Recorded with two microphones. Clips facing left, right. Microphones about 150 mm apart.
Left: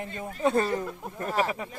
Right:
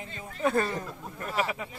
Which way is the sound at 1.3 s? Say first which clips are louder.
Left 3 dB; 45° left (ahead or behind).